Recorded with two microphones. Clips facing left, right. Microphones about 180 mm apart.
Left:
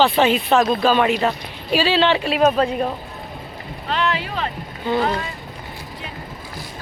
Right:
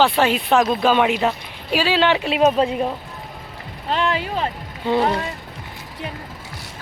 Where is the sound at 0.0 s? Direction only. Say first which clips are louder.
Left 1 dB; 5° right (ahead or behind).